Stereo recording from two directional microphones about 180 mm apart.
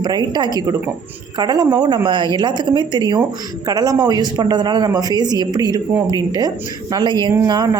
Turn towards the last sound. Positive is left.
turn(degrees=-20)  # may be behind; listen again after turning